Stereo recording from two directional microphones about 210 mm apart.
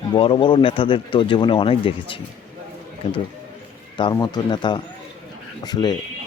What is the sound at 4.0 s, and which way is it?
Speech, 20° left (ahead or behind).